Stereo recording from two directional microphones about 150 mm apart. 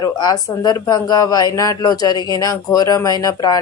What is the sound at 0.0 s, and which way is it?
A woman's voice, 25° left (ahead or behind).